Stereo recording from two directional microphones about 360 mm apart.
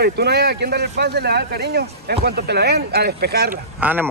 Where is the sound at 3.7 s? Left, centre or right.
Centre.